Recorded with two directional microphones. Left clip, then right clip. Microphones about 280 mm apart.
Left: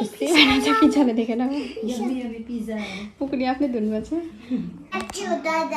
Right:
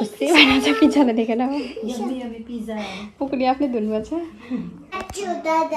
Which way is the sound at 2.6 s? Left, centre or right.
Centre.